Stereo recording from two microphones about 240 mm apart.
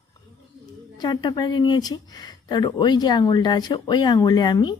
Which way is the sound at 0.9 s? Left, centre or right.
Centre.